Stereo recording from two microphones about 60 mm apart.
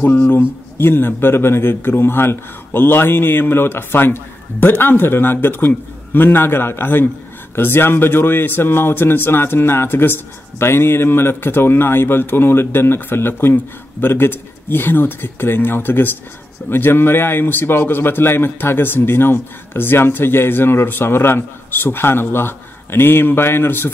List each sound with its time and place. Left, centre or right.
0.0 s a man's voice: left